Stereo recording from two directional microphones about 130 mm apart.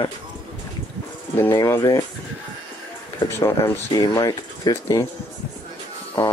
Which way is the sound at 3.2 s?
20° left (ahead or behind).